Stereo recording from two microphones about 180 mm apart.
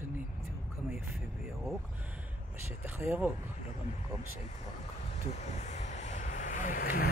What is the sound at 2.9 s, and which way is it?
Speech, 10° right (ahead or behind).